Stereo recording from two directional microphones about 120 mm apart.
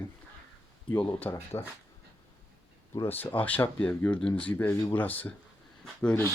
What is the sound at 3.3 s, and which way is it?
Speech, 15° left (ahead or behind).